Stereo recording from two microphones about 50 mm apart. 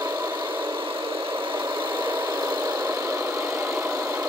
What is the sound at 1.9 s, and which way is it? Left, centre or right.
Vehicle, right.